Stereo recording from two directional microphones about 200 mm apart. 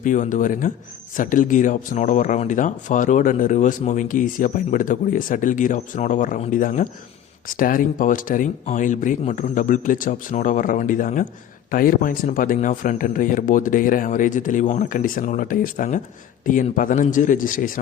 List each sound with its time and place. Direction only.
0.0 s speech: 40° left (ahead or behind)